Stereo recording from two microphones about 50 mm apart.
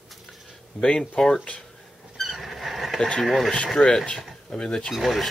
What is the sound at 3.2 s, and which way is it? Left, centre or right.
Speech, centre.